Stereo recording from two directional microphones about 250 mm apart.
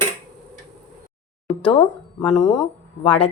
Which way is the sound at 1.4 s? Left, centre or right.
Left.